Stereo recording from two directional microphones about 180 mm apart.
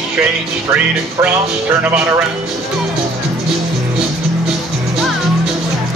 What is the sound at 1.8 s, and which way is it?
Speech, 5° right (ahead or behind).